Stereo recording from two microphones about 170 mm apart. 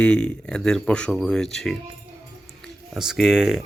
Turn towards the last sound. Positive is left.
turn(degrees=-5)  # may be behind; listen again after turning